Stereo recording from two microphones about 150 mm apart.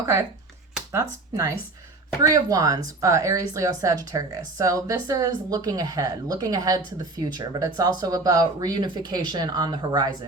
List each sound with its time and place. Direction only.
0.0 s speech: 20° right (ahead or behind)